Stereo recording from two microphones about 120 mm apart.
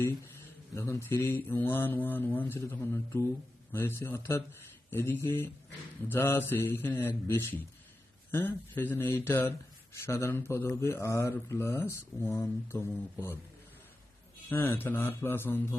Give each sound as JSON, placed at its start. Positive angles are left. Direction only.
{"t": 0.7, "sound": "speech", "side_deg": 25}
{"t": 14.5, "sound": "speech", "side_deg": 15}